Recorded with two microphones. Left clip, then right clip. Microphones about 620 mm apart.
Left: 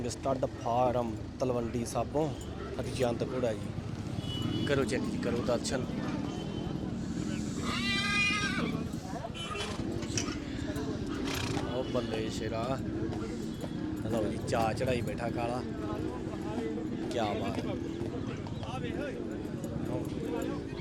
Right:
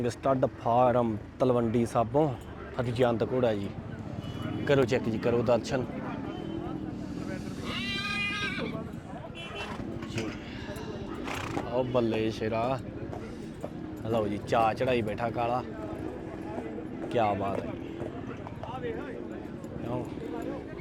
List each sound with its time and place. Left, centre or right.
0.0 s speech: centre
4.6 s speech: centre
7.7 s a sound: left
11.9 s speech: left
14.1 s speech: left
17.2 s speech: left